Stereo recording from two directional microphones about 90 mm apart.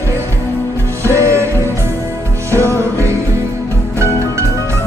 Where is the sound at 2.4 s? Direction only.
30° right (ahead or behind).